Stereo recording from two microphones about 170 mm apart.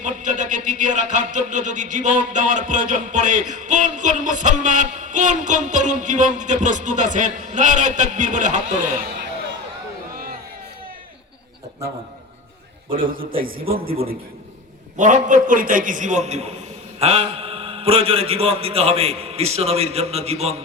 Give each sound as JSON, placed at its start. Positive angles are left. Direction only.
{"t": 0.0, "sound": "a sound", "side_deg": -45}
{"t": 12.9, "sound": "a man's voice", "side_deg": -55}
{"t": 14.9, "sound": "a man's voice", "side_deg": -45}